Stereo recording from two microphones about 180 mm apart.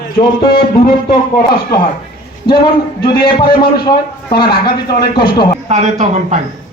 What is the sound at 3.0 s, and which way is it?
Speech, 25° left (ahead or behind).